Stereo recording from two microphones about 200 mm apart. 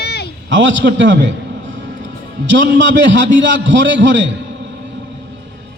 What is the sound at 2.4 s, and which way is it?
A man's voice, 65° right (ahead or behind).